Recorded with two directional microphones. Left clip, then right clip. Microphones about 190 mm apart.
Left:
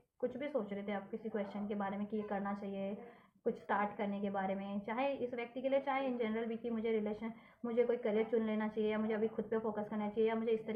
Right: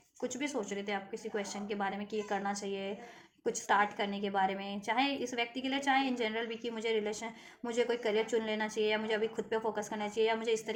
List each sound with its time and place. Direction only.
0.2 s a woman's voice: 45° right (ahead or behind)